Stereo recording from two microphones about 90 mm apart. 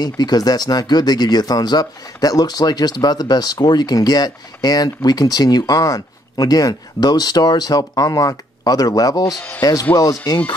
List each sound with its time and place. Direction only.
0.0 s speech: 50° left (ahead or behind)